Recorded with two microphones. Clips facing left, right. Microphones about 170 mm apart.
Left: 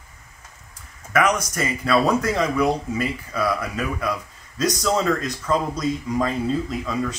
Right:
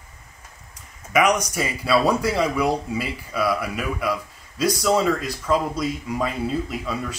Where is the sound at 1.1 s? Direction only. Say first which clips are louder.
Right 1 dB; 10° right (ahead or behind).